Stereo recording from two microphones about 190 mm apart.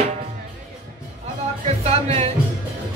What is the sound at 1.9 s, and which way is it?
Music, 35° right (ahead or behind).